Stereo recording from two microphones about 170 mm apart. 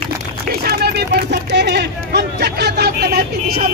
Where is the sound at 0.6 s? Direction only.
65° right (ahead or behind).